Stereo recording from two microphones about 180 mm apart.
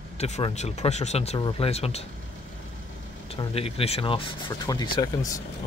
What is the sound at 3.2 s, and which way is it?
Speech, 30° left (ahead or behind).